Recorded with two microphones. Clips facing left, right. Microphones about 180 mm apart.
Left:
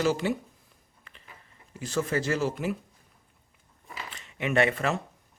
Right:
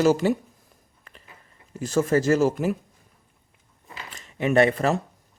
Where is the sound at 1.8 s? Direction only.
45° right (ahead or behind).